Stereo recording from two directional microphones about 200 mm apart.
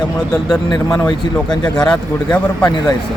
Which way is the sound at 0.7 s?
20° left (ahead or behind).